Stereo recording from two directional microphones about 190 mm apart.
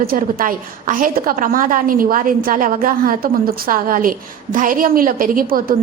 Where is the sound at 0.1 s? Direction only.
50° right (ahead or behind).